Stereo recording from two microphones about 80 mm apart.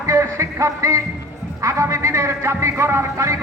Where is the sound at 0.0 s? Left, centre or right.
Right.